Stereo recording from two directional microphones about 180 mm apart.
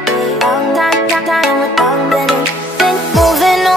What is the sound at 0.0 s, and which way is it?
Music, centre (ahead or behind).